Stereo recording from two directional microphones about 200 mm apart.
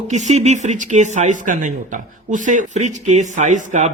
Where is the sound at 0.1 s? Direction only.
35° right (ahead or behind).